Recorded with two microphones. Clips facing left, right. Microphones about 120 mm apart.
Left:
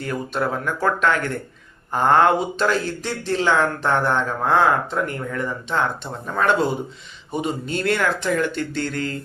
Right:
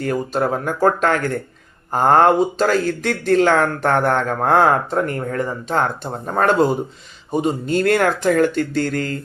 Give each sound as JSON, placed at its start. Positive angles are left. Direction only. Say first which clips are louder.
{"t": 0.0, "sound": "speech", "louder": "right 4 dB", "side_deg": -40}
{"t": 3.0, "sound": "speech", "louder": "right 7 dB", "side_deg": -50}